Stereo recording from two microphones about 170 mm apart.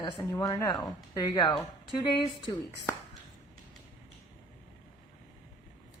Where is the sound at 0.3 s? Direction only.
15° left (ahead or behind).